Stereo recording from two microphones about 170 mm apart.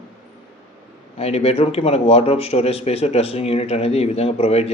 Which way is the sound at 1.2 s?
35° left (ahead or behind).